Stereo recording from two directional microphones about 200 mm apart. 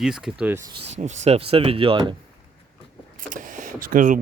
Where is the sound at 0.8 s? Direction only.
35° right (ahead or behind).